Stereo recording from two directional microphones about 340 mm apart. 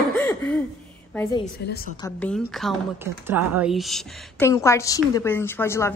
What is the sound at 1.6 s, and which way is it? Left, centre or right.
Speech, left.